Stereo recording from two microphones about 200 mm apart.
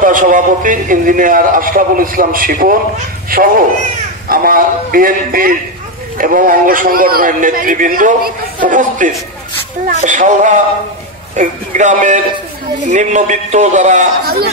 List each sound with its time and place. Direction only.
0.0 s a man's voice: 40° right (ahead or behind)